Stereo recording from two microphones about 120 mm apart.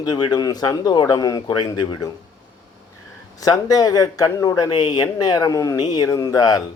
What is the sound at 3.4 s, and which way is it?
Speech, 30° left (ahead or behind).